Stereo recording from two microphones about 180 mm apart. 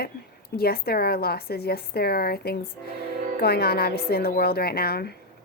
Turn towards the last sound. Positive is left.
turn(degrees=60)  # may be behind; listen again after turning